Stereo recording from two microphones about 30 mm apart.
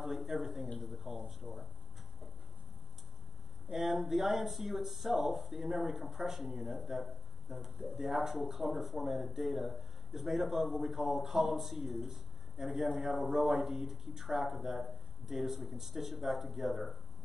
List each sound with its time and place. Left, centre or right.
0.0 s speech: centre
3.6 s speech: centre